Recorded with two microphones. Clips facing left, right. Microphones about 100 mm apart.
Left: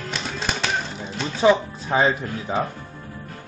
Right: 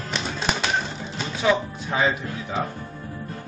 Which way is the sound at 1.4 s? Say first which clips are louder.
Left 5 dB; 30° left (ahead or behind).